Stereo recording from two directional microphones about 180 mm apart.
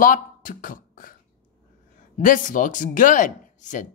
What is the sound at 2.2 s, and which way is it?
Speech, 45° left (ahead or behind).